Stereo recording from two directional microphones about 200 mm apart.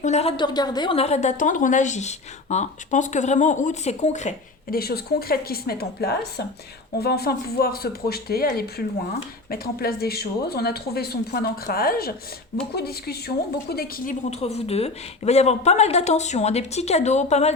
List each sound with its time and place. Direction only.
0.0 s a woman's voice: 35° left (ahead or behind)